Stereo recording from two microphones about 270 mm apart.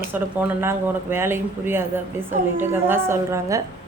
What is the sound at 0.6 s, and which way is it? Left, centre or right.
A woman's voice, centre.